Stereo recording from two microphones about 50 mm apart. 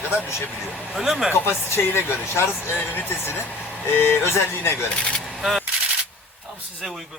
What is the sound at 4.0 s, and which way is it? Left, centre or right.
Speech, left.